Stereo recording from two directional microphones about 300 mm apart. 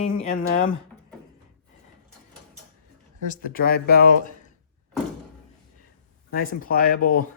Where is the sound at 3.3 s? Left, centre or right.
Left.